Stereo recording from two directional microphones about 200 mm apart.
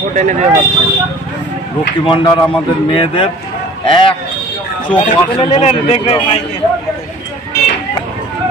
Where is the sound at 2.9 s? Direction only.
25° left (ahead or behind).